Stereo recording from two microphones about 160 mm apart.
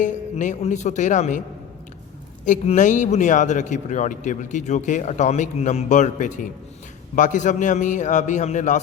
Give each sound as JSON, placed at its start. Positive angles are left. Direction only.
{"t": 0.0, "sound": "a man's voice", "side_deg": 50}
{"t": 2.4, "sound": "a man's voice", "side_deg": 50}